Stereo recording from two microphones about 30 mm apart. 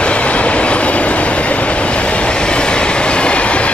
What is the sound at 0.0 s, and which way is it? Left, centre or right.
Train, left.